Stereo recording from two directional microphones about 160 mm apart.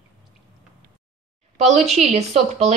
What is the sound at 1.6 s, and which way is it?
Speech, 45° right (ahead or behind).